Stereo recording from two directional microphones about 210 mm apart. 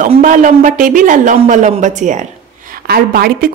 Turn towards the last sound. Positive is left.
turn(degrees=-45)  # may be behind; listen again after turning